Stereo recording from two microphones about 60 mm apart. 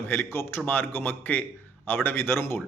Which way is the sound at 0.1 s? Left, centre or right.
Left.